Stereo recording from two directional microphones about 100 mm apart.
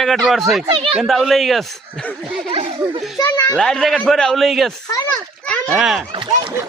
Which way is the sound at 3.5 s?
5° left (ahead or behind).